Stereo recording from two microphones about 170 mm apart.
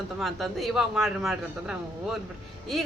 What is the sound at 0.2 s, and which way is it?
Speech, centre (ahead or behind).